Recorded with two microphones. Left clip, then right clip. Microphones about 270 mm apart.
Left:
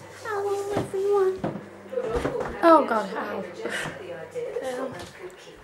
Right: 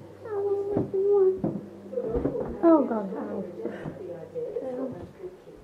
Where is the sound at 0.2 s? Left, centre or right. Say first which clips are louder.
Left 1 dB; centre.